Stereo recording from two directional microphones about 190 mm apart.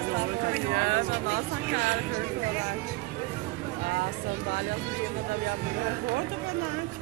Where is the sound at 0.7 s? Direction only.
50° right (ahead or behind).